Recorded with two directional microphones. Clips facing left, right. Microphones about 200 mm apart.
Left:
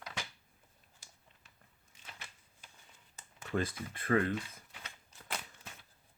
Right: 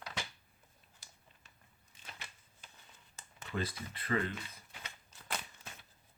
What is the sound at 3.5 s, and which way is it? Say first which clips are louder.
Speech: left 4 dB; 50° left (ahead or behind).